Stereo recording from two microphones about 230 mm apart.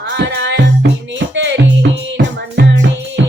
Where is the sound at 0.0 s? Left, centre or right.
Right.